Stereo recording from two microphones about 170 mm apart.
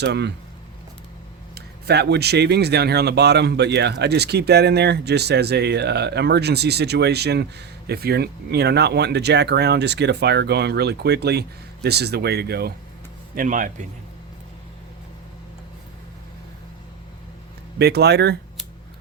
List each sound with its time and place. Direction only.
0.0 s speech: 85° right
1.5 s speech: 75° right (ahead or behind)
13.3 s speech: 50° right (ahead or behind)
17.7 s speech: 70° right (ahead or behind)